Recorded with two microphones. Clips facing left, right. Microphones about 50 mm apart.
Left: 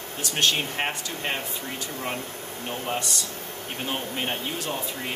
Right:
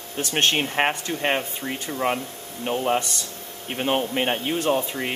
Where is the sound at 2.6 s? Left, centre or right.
Right.